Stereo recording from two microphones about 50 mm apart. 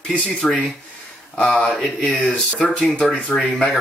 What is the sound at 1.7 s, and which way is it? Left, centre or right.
Speech, centre.